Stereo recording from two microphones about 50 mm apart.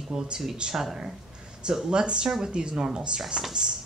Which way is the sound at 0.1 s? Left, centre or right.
Centre.